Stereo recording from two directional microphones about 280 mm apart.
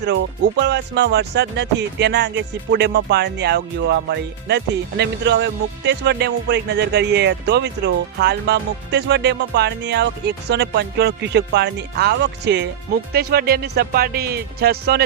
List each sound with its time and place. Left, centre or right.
0.0 s speech: right